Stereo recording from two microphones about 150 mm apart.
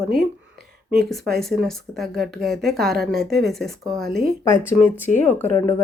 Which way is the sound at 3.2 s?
90° right.